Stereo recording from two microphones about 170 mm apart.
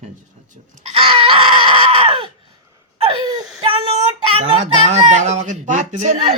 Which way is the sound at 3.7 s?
30° right (ahead or behind).